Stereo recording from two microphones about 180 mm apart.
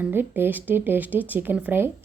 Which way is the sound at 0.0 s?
10° right (ahead or behind).